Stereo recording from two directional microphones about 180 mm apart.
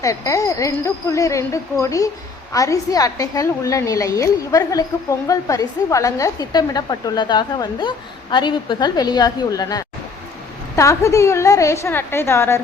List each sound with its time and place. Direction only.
0.0 s a woman's voice: 20° left (ahead or behind)